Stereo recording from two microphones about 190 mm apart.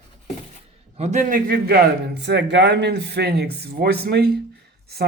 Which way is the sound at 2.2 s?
65° right (ahead or behind).